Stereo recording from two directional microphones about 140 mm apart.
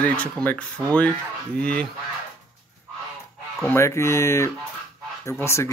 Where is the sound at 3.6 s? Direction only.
20° left (ahead or behind).